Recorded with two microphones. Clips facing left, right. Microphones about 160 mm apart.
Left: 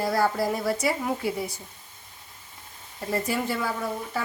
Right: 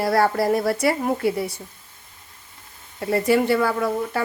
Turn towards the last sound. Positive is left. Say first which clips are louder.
# right 7 dB
turn(degrees=-70)  # may be behind; listen again after turning